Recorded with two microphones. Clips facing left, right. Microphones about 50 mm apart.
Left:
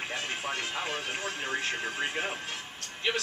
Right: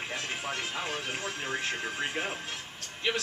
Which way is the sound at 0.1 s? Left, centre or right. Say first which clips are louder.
Even; centre.